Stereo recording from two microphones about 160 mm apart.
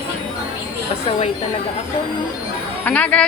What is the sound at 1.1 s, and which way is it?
Speech, 40° left (ahead or behind).